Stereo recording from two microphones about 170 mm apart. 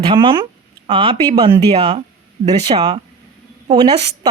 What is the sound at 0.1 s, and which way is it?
A woman's voice, 30° right (ahead or behind).